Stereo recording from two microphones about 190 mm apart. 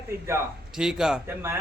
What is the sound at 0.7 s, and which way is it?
Speech, centre (ahead or behind).